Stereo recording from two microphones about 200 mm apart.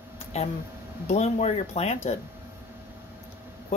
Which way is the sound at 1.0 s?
35° left (ahead or behind).